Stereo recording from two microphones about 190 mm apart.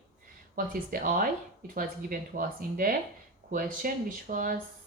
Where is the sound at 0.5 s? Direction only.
50° right (ahead or behind).